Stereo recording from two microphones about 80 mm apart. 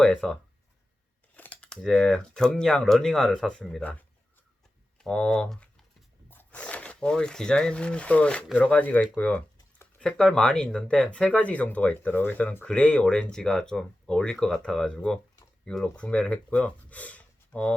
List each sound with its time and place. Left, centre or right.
0.2 s speech: centre
1.4 s a sound: centre
1.8 s speech: centre
6.3 s speech: centre